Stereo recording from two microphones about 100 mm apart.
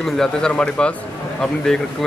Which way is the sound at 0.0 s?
5° left (ahead or behind).